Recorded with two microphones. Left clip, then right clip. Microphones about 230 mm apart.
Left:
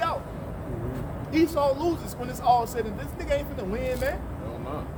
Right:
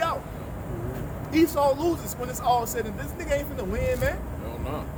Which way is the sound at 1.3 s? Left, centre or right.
Centre.